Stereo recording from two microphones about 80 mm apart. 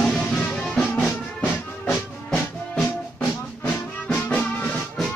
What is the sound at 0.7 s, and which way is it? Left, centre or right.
Music, centre.